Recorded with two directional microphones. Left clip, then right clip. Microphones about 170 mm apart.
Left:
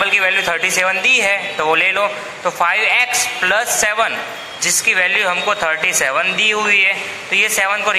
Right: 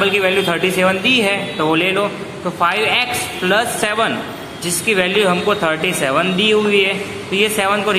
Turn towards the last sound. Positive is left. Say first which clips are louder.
# even
turn(degrees=20)  # may be behind; listen again after turning